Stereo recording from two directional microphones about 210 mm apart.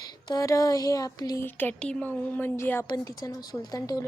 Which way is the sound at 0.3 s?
15° left (ahead or behind).